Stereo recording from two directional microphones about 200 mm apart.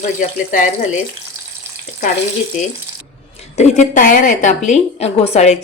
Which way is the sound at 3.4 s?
35° left (ahead or behind).